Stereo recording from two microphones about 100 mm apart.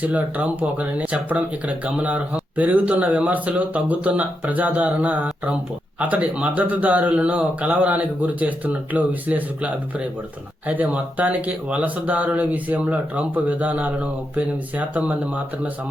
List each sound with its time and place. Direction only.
0.0 s speech: 15° right (ahead or behind)